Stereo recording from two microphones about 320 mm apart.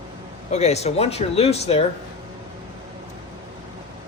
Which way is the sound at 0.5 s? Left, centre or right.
Left.